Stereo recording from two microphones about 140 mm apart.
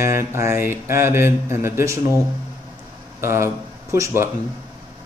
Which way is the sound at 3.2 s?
20° right (ahead or behind).